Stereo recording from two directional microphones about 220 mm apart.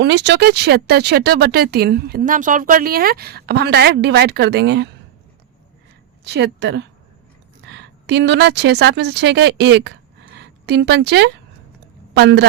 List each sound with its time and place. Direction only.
0.0 s speech: 50° right (ahead or behind)
6.2 s a woman's voice: 50° right (ahead or behind)